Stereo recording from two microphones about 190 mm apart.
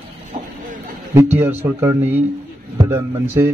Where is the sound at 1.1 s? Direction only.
10° right (ahead or behind).